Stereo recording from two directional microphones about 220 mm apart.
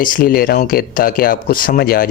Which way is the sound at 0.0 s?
40° left (ahead or behind).